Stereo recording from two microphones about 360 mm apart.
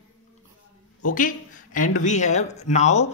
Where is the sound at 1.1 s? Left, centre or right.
Left.